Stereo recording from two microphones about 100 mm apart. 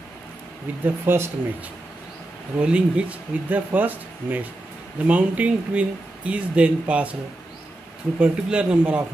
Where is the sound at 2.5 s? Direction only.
10° right (ahead or behind).